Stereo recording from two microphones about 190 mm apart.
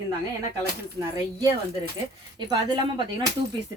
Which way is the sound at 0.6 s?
20° right (ahead or behind).